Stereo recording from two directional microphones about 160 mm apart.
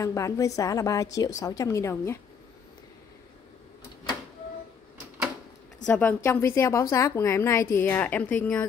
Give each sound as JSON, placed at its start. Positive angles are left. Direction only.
{"t": 0.0, "sound": "a woman's voice", "side_deg": 20}
{"t": 5.9, "sound": "a woman's voice", "side_deg": 10}